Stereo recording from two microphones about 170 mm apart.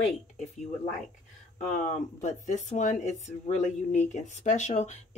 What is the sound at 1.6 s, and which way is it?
Speech, 45° left (ahead or behind).